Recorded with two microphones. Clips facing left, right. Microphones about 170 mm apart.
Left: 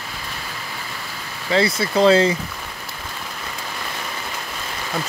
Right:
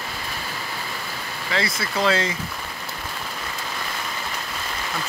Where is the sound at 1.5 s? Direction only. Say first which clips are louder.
Left 8 dB; 30° left (ahead or behind).